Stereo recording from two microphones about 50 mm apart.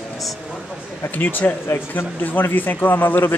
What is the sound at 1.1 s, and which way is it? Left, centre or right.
Speech, left.